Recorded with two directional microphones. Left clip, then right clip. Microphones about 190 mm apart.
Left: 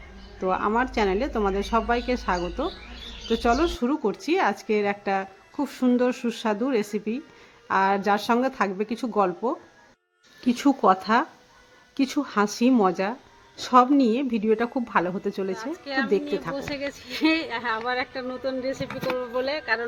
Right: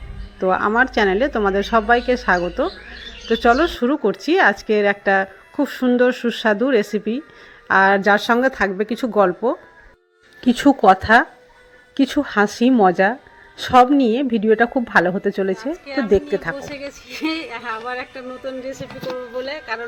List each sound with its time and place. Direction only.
0.3 s speech: 15° right (ahead or behind)
15.7 s a woman's voice: 20° left (ahead or behind)